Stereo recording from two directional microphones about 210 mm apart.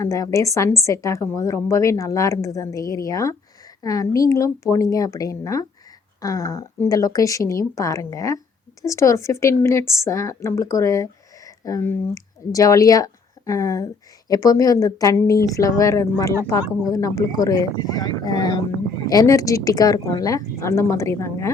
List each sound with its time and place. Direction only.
0.0 s a woman's voice: 15° left (ahead or behind)